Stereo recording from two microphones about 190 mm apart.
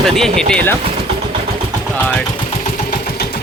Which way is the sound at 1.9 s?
10° left (ahead or behind).